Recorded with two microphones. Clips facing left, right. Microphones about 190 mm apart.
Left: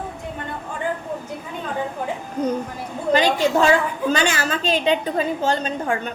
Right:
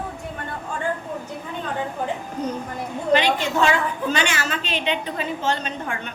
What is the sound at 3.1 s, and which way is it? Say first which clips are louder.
A woman's voice: left 2 dB; 40° left (ahead or behind).